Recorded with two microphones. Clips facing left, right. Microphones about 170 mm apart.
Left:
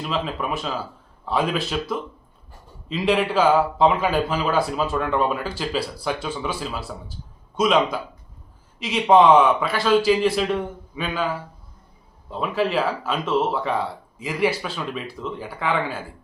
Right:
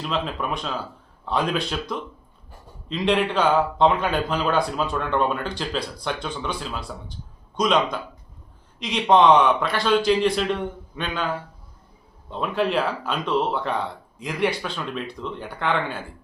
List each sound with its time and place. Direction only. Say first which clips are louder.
0.0 s speech: left 1 dB; centre (ahead or behind)